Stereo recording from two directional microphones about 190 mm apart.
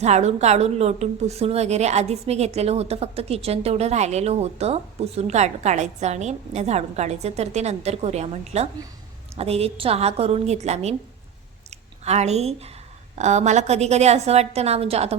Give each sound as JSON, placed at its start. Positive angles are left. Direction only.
{"t": 0.0, "sound": "a woman's voice", "side_deg": -35}
{"t": 12.0, "sound": "a woman's voice", "side_deg": -35}